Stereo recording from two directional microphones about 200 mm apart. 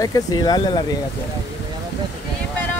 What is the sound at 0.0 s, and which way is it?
Speech, 20° left (ahead or behind).